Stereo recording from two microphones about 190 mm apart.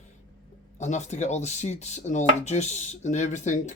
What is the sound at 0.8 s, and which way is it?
Speech, 40° left (ahead or behind).